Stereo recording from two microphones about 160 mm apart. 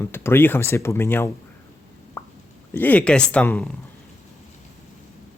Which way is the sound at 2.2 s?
15° left (ahead or behind).